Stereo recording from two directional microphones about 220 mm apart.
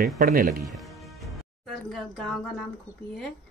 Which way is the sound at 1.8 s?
Centre (ahead or behind).